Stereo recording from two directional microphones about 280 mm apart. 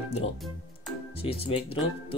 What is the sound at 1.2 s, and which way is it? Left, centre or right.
Speech, left.